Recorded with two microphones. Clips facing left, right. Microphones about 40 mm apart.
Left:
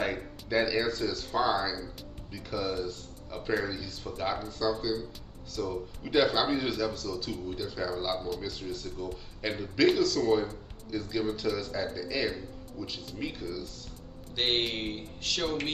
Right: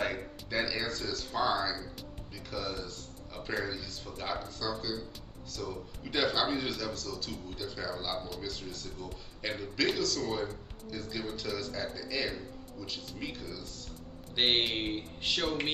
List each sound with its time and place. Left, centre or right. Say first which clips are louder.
0.0 s a man's voice: left 2 dB; centre
14.3 s a man's voice: even; centre